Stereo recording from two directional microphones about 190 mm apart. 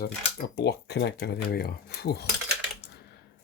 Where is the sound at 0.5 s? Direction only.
65° left (ahead or behind).